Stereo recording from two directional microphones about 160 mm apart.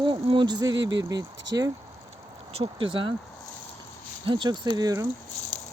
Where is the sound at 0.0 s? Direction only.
30° right (ahead or behind).